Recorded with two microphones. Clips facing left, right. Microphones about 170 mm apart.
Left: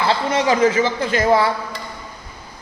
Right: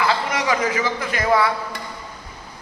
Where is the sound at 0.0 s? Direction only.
30° left (ahead or behind).